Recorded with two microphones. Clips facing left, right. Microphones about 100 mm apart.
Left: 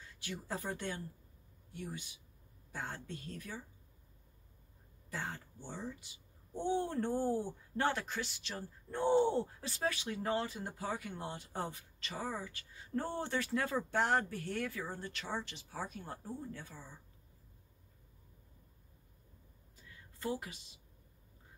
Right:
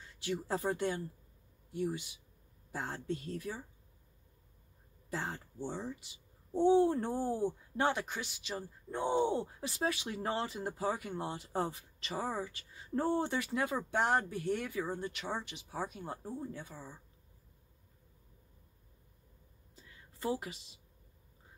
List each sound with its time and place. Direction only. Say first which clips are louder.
0.2 s speech: right 7 dB; 25° right (ahead or behind)
5.1 s speech: right 3 dB; 25° right (ahead or behind); by 9.7 s 5° right (ahead or behind)
9.7 s speech: right 2 dB; 20° right (ahead or behind)
19.7 s a sound: right 1 dB; 25° right (ahead or behind)